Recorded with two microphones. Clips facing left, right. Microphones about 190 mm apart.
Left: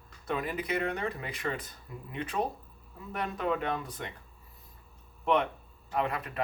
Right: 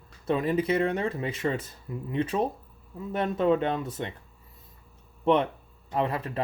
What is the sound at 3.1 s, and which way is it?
Speech, 25° right (ahead or behind).